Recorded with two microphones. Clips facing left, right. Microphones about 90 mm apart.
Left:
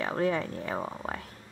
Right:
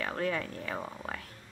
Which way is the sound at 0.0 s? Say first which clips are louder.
Left 4 dB; 20° left (ahead or behind).